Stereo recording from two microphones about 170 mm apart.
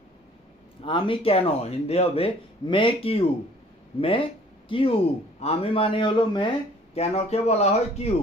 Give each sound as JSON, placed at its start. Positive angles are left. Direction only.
{"t": 0.8, "sound": "speech", "side_deg": 30}
{"t": 6.9, "sound": "speech", "side_deg": 40}